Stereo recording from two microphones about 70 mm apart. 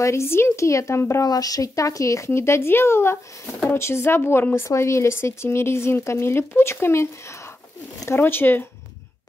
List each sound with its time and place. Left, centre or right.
0.0 s speech: left
1.2 s speech: left